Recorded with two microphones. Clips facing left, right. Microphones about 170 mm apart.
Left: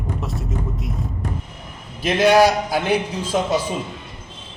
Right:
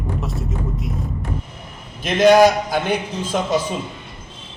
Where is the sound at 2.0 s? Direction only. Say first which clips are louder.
Right 2 dB; 5° left (ahead or behind).